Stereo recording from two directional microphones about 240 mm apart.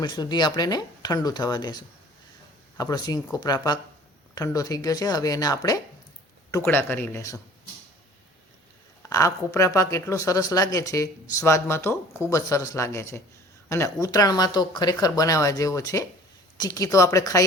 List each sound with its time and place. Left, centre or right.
0.0 s speech: centre
9.0 s speech: centre